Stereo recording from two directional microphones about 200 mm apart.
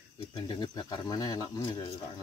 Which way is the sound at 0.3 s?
20° left (ahead or behind).